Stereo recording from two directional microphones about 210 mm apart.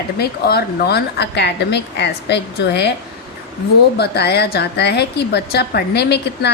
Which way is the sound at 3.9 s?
50° left (ahead or behind).